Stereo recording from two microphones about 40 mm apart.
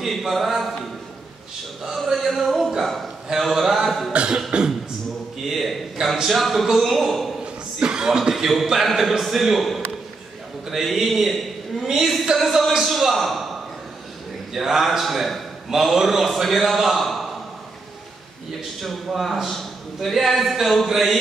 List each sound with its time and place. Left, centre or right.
0.1 s a man's voice: centre
2.0 s music: centre
3.3 s a man's voice: centre
4.1 s beatboxing: right
5.4 s a sound: centre
6.2 s a man's voice: centre
7.8 s a man's voice: centre
14.5 s a man's voice: centre
18.8 s a man's voice: centre